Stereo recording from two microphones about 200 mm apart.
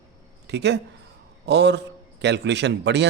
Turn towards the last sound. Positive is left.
turn(degrees=-60)  # may be behind; listen again after turning